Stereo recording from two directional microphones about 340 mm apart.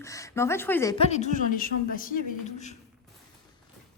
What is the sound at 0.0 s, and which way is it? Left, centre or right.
A woman's voice, centre.